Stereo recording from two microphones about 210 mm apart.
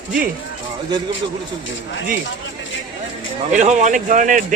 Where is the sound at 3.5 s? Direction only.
35° right (ahead or behind).